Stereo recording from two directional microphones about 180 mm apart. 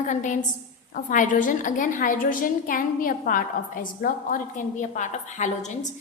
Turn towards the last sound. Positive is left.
turn(degrees=40)  # may be behind; listen again after turning